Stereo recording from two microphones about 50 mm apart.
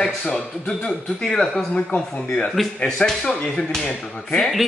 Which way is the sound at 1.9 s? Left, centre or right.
Left.